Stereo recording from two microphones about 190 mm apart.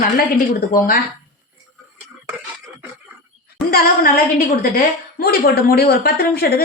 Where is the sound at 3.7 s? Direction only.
50° left (ahead or behind).